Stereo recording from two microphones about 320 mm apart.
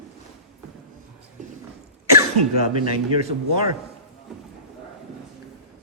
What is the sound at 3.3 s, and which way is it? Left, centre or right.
Speech, right.